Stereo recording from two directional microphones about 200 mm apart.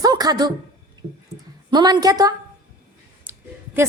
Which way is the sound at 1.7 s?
20° right (ahead or behind).